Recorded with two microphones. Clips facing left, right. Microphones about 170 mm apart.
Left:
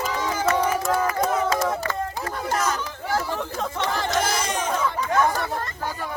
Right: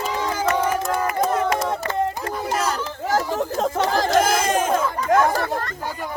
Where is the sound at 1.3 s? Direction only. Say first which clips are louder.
Right 1 dB; 5° left (ahead or behind).